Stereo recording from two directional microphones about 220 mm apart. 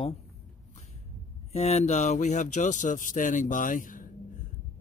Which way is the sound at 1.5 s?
30° left (ahead or behind).